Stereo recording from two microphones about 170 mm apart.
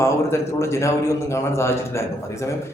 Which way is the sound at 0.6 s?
15° left (ahead or behind).